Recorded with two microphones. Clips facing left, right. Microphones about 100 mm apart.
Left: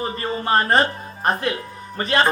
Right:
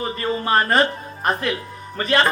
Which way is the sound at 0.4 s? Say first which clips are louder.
Even; 30° left (ahead or behind).